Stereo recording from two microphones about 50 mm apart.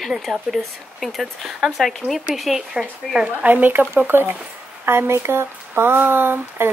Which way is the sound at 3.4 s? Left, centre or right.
Right.